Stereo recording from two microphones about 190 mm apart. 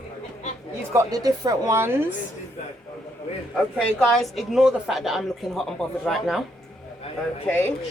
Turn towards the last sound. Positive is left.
turn(degrees=10)  # may be behind; listen again after turning